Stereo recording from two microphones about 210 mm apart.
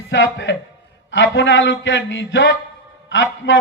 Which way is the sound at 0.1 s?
60° left (ahead or behind).